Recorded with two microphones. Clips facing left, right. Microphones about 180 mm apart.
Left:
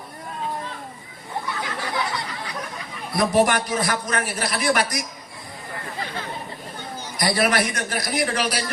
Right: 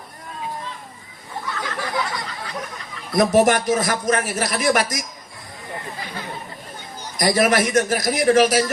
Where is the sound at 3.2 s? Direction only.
45° right (ahead or behind).